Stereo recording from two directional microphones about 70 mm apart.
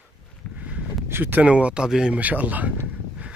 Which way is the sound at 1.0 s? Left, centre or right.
Right.